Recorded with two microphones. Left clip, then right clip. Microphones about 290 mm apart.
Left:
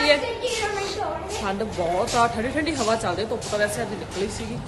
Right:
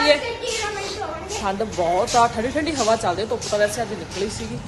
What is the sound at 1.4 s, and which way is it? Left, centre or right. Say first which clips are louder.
Speech: right 5 dB; centre.